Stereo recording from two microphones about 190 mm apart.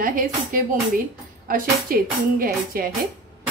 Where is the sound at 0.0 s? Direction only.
45° right (ahead or behind).